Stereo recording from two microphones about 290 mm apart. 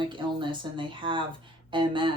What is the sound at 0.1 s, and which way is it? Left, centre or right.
Speech, centre.